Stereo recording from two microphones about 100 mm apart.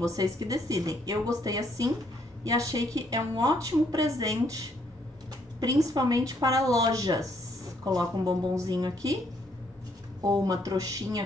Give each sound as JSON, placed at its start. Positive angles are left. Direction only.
{"t": 0.0, "sound": "a woman's voice", "side_deg": -35}
{"t": 10.2, "sound": "a woman's voice", "side_deg": -40}